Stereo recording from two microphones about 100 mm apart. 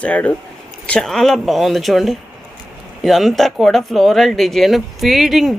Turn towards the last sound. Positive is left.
turn(degrees=-5)  # may be behind; listen again after turning